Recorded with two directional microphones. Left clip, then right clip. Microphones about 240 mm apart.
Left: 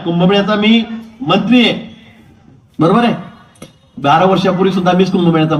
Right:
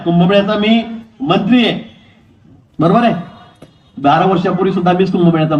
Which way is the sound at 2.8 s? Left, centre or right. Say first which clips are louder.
Even; left.